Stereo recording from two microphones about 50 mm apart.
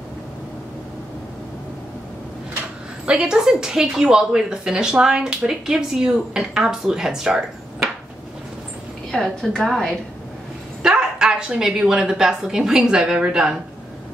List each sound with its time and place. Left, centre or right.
3.1 s a woman's voice: centre
9.1 s a woman's voice: centre
10.8 s speech: centre